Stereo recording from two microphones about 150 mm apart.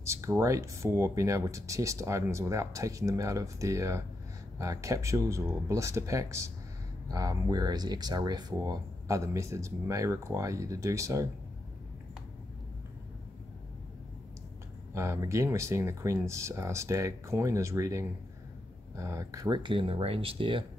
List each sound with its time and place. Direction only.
0.0 s speech: 20° right (ahead or behind)
15.0 s speech: 20° right (ahead or behind); by 20.6 s 35° right (ahead or behind)